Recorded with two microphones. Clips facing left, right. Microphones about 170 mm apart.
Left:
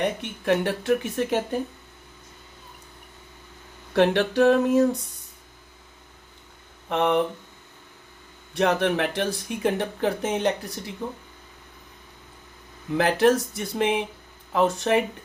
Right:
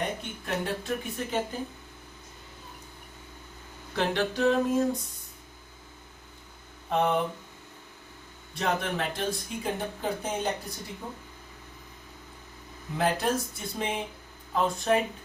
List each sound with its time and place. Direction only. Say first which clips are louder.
0.0 s speech: left 7 dB; 75° left (ahead or behind)
3.9 s a sound: left 8 dB; 65° left (ahead or behind)
6.9 s speech: left 4 dB; 75° left (ahead or behind)
8.5 s speech: left 7 dB; 70° left (ahead or behind)
13.0 s speech: left 7 dB; 80° left